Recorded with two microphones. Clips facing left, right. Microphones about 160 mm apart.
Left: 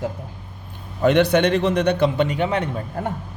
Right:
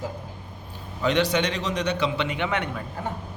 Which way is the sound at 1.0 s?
55° left (ahead or behind).